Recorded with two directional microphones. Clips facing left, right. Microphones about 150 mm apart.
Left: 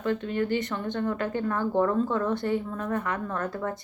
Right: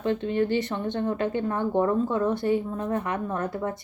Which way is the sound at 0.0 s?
25° right (ahead or behind).